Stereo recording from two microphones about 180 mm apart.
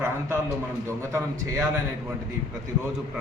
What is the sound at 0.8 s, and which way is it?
Speech, 15° right (ahead or behind).